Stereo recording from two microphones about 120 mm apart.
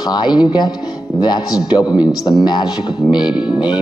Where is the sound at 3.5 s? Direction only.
35° left (ahead or behind).